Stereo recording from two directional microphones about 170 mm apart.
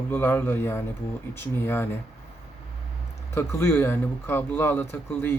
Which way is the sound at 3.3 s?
15° left (ahead or behind).